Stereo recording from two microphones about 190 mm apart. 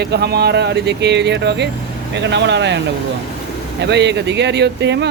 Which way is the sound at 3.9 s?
65° right (ahead or behind).